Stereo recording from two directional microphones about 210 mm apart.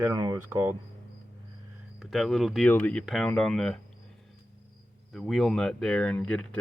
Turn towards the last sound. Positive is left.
turn(degrees=5)  # may be behind; listen again after turning